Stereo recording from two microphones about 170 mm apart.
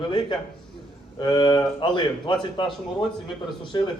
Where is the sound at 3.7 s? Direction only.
25° left (ahead or behind).